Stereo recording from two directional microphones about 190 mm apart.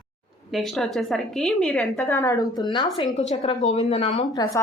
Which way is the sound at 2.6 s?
20° left (ahead or behind).